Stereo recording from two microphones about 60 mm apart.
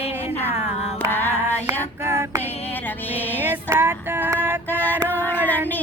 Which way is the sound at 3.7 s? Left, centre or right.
Right.